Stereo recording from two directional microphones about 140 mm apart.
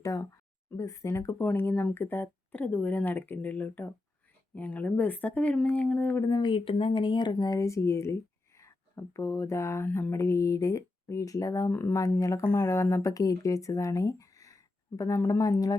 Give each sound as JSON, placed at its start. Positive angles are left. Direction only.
{"t": 0.0, "sound": "a sound", "side_deg": 25}
{"t": 0.8, "sound": "speech", "side_deg": 20}
{"t": 6.3, "sound": "speech", "side_deg": 35}